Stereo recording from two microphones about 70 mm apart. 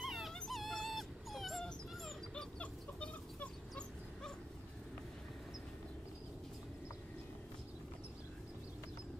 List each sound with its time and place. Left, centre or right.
0.0 s dog: centre
2.6 s dog: centre